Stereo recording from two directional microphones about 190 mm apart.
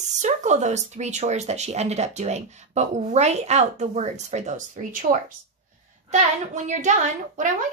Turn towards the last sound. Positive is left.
turn(degrees=-40)  # may be behind; listen again after turning